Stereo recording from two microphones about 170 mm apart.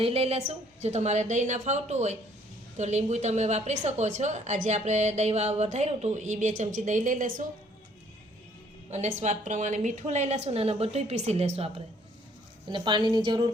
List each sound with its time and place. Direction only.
0.0 s a woman's voice: 35° right (ahead or behind)
8.9 s a woman's voice: 40° right (ahead or behind); by 13.4 s 25° right (ahead or behind)